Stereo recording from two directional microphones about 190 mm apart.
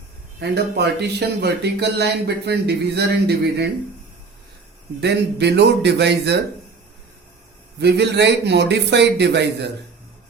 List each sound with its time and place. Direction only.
0.3 s speech: 60° right (ahead or behind)
4.9 s speech: 60° right (ahead or behind)
7.8 s speech: 60° right (ahead or behind)